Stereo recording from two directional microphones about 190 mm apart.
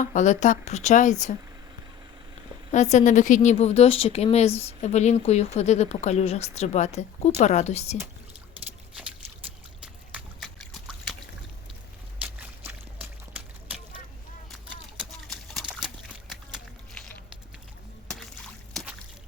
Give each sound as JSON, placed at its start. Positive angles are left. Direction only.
{"t": 0.0, "sound": "a woman's voice", "side_deg": 40}
{"t": 2.7, "sound": "a woman's voice", "side_deg": 40}
{"t": 9.8, "sound": "trickle", "side_deg": -5}
{"t": 12.2, "sound": "a sound", "side_deg": -10}